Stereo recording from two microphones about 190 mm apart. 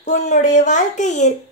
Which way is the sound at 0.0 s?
40° left (ahead or behind).